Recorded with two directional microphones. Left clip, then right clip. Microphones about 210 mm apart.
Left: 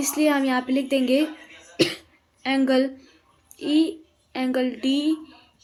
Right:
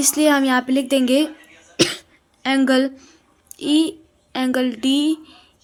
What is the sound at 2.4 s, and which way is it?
Speech, 50° right (ahead or behind).